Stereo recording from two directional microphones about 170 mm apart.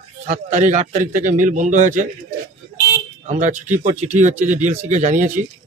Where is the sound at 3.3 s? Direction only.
45° right (ahead or behind).